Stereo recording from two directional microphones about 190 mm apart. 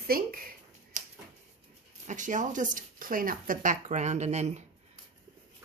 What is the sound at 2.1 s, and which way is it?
Speech, 40° right (ahead or behind).